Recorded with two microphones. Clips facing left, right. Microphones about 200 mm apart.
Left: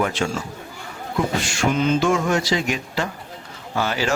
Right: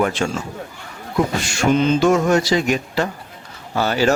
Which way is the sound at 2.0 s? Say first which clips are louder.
Right 5 dB; 40° right (ahead or behind).